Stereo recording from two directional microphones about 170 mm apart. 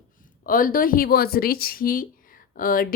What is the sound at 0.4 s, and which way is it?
Speech, 55° left (ahead or behind).